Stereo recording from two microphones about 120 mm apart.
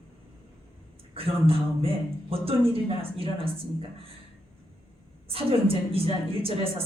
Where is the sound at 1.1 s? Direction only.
50° right (ahead or behind).